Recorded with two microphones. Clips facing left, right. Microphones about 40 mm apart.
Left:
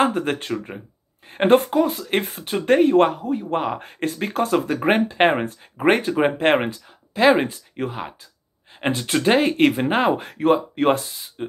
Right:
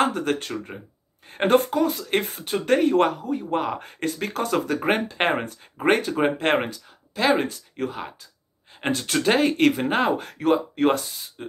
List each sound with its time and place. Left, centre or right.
0.0 s speech: left
1.9 s speech: centre
11.4 s spray: centre